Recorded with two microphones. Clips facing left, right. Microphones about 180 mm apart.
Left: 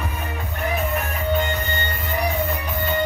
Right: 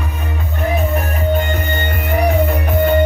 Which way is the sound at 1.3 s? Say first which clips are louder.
Right 4 dB; 55° right (ahead or behind).